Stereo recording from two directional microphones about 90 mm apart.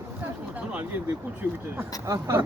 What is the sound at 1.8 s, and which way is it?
Speech, 30° right (ahead or behind).